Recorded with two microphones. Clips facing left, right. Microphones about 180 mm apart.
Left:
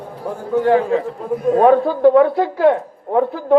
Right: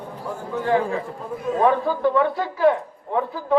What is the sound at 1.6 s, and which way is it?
A man's voice, 40° left (ahead or behind).